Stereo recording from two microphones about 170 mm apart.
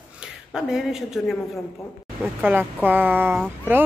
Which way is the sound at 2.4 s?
10° right (ahead or behind).